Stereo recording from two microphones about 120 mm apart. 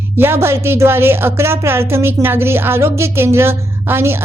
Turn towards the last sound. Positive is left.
turn(degrees=-20)  # may be behind; listen again after turning